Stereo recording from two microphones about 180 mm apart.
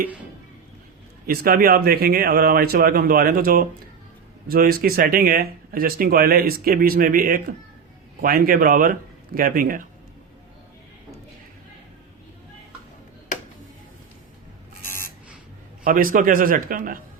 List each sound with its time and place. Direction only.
1.3 s speech: 55° right (ahead or behind)
15.8 s speech: 50° right (ahead or behind)